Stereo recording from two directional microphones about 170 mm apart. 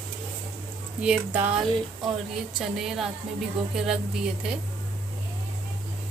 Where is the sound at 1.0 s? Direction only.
10° right (ahead or behind).